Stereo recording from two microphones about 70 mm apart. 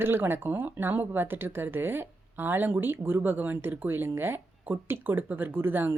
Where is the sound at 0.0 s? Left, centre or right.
Right.